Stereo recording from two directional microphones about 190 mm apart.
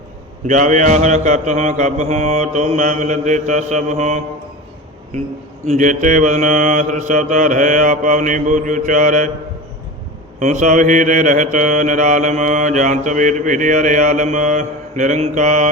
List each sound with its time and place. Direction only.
0.4 s mantra: 40° right (ahead or behind)
5.6 s mantra: 40° right (ahead or behind)
10.4 s mantra: 40° right (ahead or behind)